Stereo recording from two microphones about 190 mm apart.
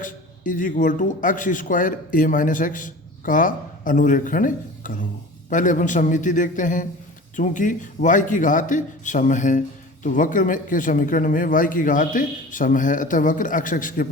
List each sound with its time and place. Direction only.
0.0 s a man's voice: 45° left (ahead or behind)